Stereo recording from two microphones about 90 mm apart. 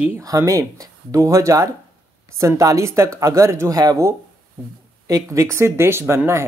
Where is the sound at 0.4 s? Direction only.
40° right (ahead or behind).